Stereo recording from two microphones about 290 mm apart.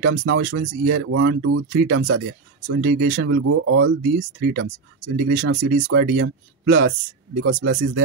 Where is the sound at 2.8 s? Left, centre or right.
Right.